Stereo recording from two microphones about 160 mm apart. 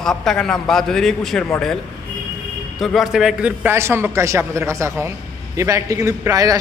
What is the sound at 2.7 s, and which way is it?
A man's voice, centre (ahead or behind).